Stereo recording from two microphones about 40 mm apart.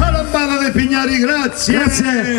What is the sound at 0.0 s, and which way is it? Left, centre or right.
A man's voice, centre.